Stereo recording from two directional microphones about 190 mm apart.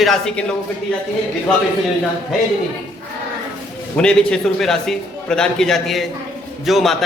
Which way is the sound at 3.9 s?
5° left (ahead or behind).